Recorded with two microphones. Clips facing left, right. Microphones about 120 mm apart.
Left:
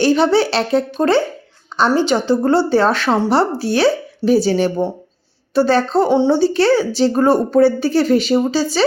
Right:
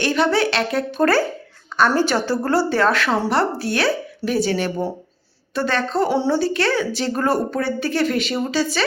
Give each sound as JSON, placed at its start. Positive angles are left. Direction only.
{"t": 0.0, "sound": "a woman's voice", "side_deg": 30}